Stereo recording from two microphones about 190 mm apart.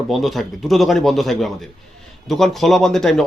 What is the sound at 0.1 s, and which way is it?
Speech, centre (ahead or behind).